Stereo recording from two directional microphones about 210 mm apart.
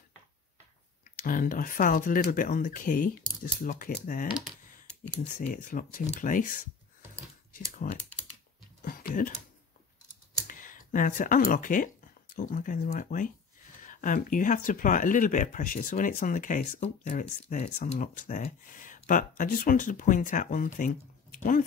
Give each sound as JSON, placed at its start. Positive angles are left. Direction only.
{"t": 1.2, "sound": "speech", "side_deg": 40}
{"t": 5.3, "sound": "speech", "side_deg": 40}
{"t": 7.8, "sound": "speech", "side_deg": 40}
{"t": 8.8, "sound": "a sound", "side_deg": 40}
{"t": 10.4, "sound": "speech", "side_deg": 40}